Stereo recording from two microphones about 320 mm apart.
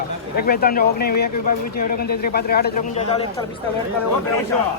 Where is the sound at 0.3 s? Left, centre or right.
Left.